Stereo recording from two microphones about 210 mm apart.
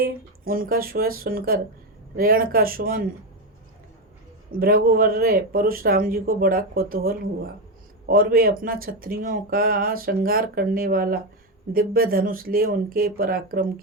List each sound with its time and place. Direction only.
0.0 s speech: 45° right (ahead or behind)
4.5 s speech: 45° right (ahead or behind)